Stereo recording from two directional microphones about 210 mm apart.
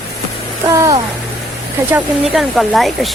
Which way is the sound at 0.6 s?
15° right (ahead or behind).